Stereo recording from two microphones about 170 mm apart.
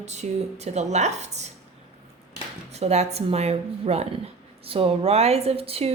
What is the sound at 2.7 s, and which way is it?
Speech, 40° right (ahead or behind).